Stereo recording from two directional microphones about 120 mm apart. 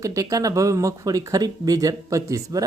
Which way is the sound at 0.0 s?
30° right (ahead or behind).